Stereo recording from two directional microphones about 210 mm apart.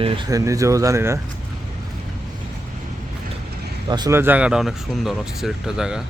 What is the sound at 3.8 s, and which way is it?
Speech, 20° right (ahead or behind).